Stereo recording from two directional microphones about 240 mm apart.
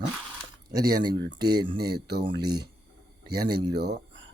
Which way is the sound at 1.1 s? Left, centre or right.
Right.